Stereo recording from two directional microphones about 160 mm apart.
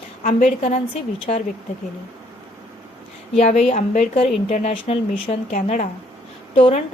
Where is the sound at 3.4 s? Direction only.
40° left (ahead or behind).